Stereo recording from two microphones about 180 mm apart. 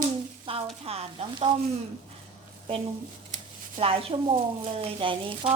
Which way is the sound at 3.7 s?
30° right (ahead or behind).